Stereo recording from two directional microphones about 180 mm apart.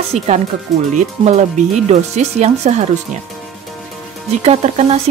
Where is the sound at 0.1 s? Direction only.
35° right (ahead or behind).